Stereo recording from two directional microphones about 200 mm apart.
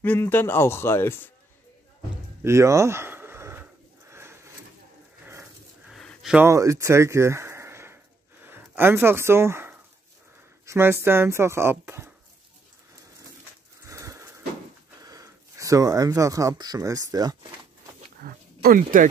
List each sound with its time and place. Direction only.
0.0 s a man's voice: 10° left (ahead or behind)
2.4 s a sound: 15° right (ahead or behind)
4.1 s drawer open or close: 15° right (ahead or behind)
5.2 s dog: 10° right (ahead or behind)
5.9 s a sound: centre (ahead or behind)
10.6 s speech: 15° right (ahead or behind)
13.8 s wheeze: 15° right (ahead or behind)
15.0 s speech: 15° right (ahead or behind)
18.2 s dog: 45° right (ahead or behind)